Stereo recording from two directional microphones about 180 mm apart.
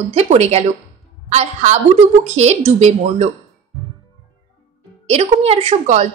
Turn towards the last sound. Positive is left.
turn(degrees=-40)  # may be behind; listen again after turning